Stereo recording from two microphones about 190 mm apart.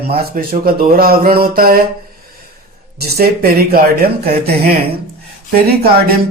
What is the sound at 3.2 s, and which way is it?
Speech, 50° right (ahead or behind).